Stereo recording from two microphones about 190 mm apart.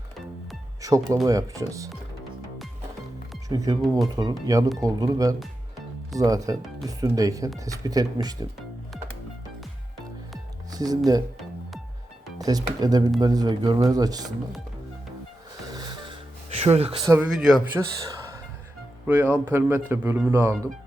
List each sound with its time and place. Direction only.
0.8 s speech: 15° right (ahead or behind)
3.5 s speech: 20° right (ahead or behind)
3.8 s speech: centre (ahead or behind)
4.1 s speech: 20° right (ahead or behind)
10.7 s music: 20° right (ahead or behind)
12.4 s speech: 20° right (ahead or behind)
15.7 s music: 20° right (ahead or behind)
16.6 s speech: 35° right (ahead or behind)
17.0 s speech: 15° right (ahead or behind)
17.2 s speech: centre (ahead or behind)
17.7 s speech: 15° right (ahead or behind)